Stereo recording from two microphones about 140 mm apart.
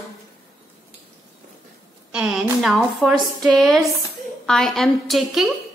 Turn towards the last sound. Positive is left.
turn(degrees=0)  # may be behind; listen again after turning